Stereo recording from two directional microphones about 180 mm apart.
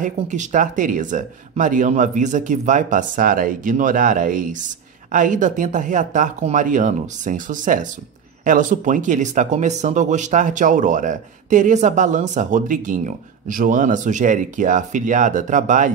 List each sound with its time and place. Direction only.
0.0 s speech: 45° right (ahead or behind)